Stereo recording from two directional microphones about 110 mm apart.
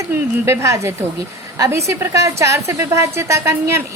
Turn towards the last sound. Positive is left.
turn(degrees=-25)  # may be behind; listen again after turning